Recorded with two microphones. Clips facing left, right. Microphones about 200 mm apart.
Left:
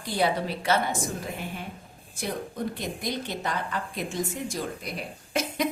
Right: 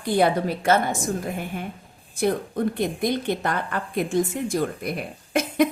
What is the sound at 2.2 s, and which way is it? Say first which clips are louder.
A woman's voice: right 8 dB; 55° right (ahead or behind).